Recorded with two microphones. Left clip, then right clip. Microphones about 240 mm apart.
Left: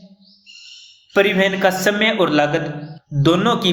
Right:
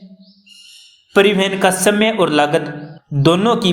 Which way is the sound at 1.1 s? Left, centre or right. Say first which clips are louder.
Right 2 dB; right.